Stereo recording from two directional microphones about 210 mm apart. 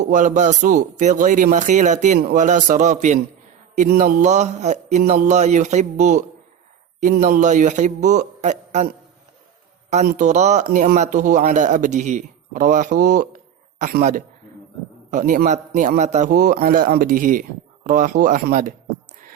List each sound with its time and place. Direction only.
0.0 s speech: 35° right (ahead or behind)
9.9 s speech: 35° right (ahead or behind)